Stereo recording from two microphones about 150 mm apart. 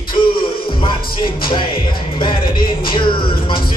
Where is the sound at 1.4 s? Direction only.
35° left (ahead or behind).